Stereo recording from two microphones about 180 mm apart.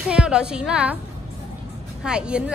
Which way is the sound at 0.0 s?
5° right (ahead or behind).